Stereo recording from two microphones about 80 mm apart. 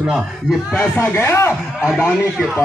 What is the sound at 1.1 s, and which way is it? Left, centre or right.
Speech, left.